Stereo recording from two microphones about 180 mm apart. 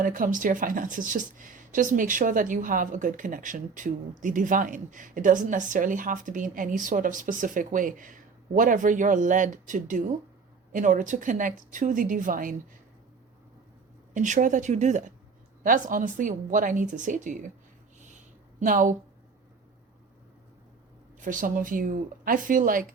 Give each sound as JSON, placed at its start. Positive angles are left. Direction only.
{"t": 0.0, "sound": "speech", "side_deg": -50}
{"t": 14.1, "sound": "speech", "side_deg": -45}
{"t": 18.6, "sound": "speech", "side_deg": -50}
{"t": 21.2, "sound": "speech", "side_deg": -45}